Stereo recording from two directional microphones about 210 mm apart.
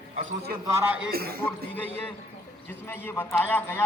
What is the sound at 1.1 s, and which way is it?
Speech, 45° right (ahead or behind).